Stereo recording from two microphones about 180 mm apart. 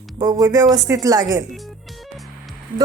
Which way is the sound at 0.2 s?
20° right (ahead or behind).